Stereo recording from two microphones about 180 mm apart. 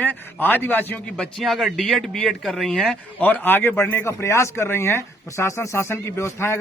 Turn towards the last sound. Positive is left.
turn(degrees=15)  # may be behind; listen again after turning